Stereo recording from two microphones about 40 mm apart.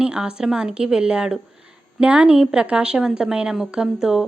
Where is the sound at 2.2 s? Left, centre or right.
Centre.